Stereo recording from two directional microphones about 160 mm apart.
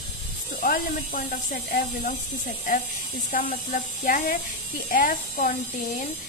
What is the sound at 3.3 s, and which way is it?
Speech, 65° left (ahead or behind).